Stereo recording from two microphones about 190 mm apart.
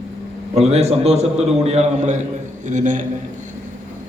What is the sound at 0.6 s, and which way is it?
A man's voice, 35° right (ahead or behind).